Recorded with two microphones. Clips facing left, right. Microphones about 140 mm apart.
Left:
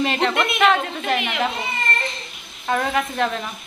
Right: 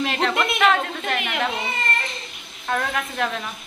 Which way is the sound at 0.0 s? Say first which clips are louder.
Left 2 dB; centre (ahead or behind).